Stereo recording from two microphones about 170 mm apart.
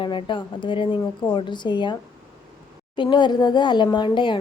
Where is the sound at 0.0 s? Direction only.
30° left (ahead or behind).